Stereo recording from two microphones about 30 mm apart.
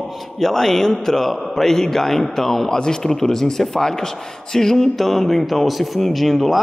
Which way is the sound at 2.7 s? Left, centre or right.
Left.